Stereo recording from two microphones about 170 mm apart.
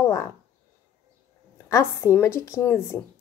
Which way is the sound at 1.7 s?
15° left (ahead or behind).